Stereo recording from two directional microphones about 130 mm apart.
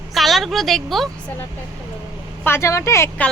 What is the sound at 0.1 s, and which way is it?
Speech, centre (ahead or behind).